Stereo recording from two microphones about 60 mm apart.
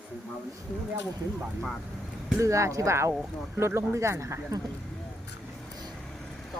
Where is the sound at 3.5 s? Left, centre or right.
Right.